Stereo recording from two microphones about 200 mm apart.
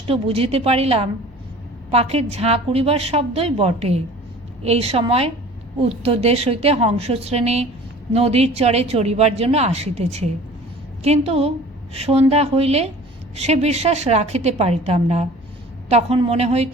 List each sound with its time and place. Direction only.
0.1 s a woman's voice: 30° right (ahead or behind)